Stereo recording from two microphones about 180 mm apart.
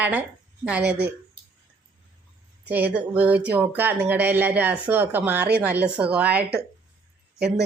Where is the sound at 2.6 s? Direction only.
10° right (ahead or behind).